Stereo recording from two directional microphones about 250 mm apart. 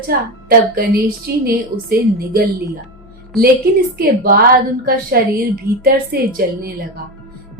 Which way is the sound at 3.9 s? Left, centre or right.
Right.